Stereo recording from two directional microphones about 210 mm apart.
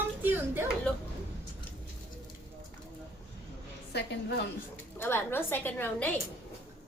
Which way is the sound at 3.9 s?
55° left (ahead or behind).